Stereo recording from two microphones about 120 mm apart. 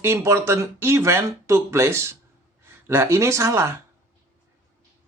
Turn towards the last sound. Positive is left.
turn(degrees=-25)  # may be behind; listen again after turning